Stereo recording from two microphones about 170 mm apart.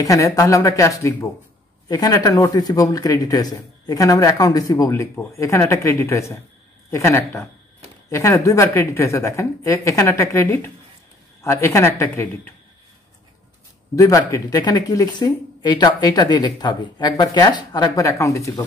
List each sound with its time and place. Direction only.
0.0 s a woman's voice: 20° left (ahead or behind)
13.9 s speech: 20° left (ahead or behind)